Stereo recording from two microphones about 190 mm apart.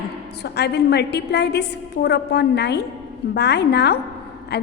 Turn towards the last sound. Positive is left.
turn(degrees=60)  # may be behind; listen again after turning